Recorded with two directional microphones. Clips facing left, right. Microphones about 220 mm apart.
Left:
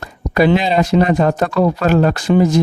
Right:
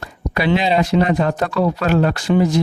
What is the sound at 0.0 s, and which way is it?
Speech, 45° left (ahead or behind).